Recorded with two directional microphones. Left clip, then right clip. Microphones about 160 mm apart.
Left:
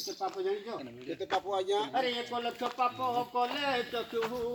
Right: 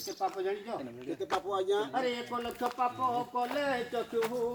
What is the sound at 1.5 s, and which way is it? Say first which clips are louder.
Speech: even; 35° right (ahead or behind).